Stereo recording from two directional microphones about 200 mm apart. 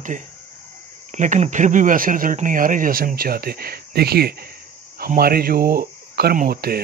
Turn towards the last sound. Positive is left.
turn(degrees=-50)  # may be behind; listen again after turning